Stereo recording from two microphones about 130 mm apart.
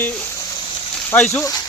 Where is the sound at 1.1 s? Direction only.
20° left (ahead or behind).